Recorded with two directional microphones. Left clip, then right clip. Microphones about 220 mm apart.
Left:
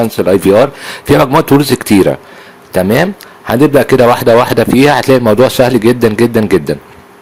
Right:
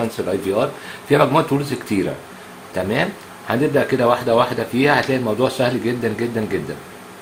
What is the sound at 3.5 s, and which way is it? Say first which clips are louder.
Speech: left 10 dB; 50° left (ahead or behind).